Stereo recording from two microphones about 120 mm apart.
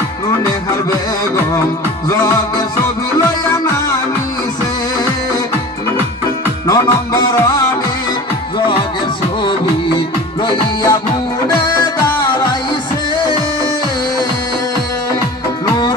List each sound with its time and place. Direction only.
6.7 s music: 30° left (ahead or behind)
9.4 s music: 40° left (ahead or behind)